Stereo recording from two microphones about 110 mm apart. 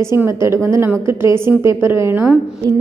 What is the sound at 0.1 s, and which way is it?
A woman's voice, 25° right (ahead or behind).